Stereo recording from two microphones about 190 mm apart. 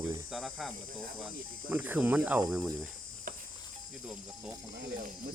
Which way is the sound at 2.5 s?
Centre (ahead or behind).